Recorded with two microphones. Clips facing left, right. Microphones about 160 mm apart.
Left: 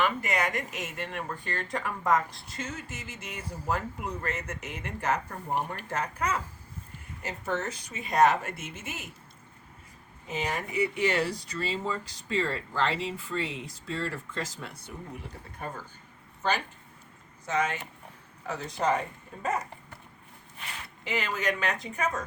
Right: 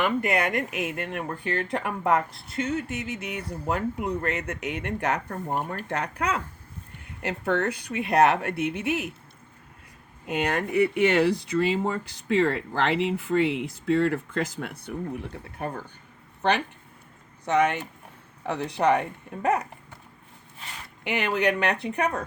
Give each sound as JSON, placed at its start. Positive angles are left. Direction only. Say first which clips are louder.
{"t": 0.2, "sound": "speech", "louder": "right 5 dB", "side_deg": -60}
{"t": 10.2, "sound": "speech", "louder": "right 6 dB", "side_deg": -65}
{"t": 21.0, "sound": "speech", "louder": "right 6 dB", "side_deg": -65}